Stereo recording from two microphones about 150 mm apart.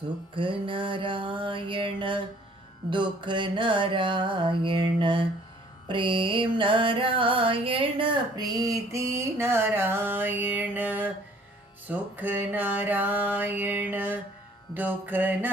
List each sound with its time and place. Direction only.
0.3 s music: 35° right (ahead or behind)
5.9 s a sound: 35° right (ahead or behind); by 11.1 s 10° right (ahead or behind)
11.9 s music: 10° right (ahead or behind)